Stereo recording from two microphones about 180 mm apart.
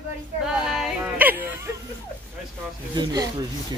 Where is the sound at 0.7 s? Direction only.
5° right (ahead or behind).